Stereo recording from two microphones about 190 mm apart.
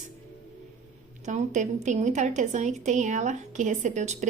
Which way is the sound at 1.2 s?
40° right (ahead or behind).